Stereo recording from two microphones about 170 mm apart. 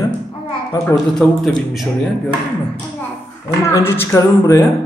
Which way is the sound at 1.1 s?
5° left (ahead or behind).